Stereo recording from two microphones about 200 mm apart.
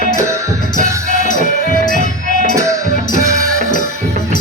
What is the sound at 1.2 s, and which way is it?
Music, 40° left (ahead or behind).